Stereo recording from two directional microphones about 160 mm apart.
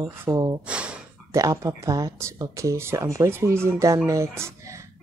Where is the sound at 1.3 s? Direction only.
20° right (ahead or behind).